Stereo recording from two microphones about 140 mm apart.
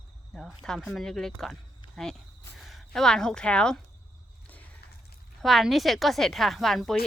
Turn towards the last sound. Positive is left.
turn(degrees=5)  # may be behind; listen again after turning